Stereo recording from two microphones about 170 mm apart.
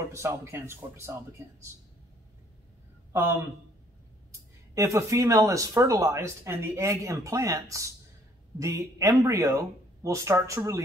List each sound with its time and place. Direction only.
0.1 s speech: 15° right (ahead or behind)
3.1 s a man's voice: 15° right (ahead or behind)
4.7 s speech: 20° right (ahead or behind)